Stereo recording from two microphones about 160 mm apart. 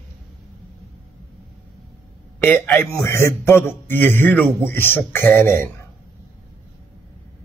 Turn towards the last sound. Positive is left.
turn(degrees=15)  # may be behind; listen again after turning